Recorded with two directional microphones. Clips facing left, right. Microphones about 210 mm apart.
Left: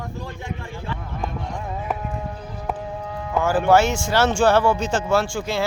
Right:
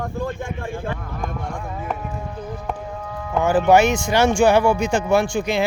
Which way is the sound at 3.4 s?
15° right (ahead or behind).